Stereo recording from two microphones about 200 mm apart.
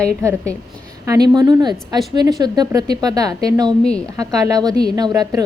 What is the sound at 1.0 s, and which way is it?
A woman's voice, 20° right (ahead or behind).